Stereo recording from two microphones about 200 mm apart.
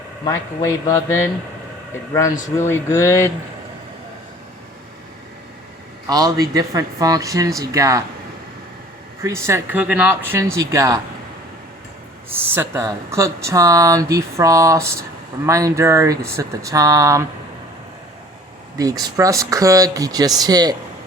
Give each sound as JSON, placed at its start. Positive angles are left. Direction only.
{"t": 0.3, "sound": "a man's voice", "side_deg": 15}
{"t": 2.6, "sound": "a man's voice", "side_deg": 15}
{"t": 6.1, "sound": "speech", "side_deg": -20}
{"t": 9.2, "sound": "speech", "side_deg": -15}
{"t": 12.3, "sound": "speech", "side_deg": -10}
{"t": 18.8, "sound": "speech", "side_deg": -20}